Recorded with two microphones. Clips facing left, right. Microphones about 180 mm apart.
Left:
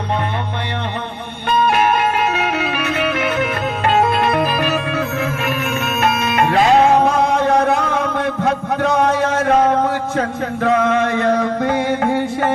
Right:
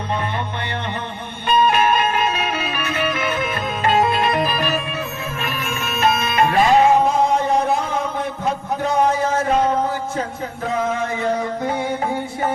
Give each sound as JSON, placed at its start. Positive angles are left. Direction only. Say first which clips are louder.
{"t": 1.5, "sound": "music", "louder": "left 1 dB", "side_deg": 70}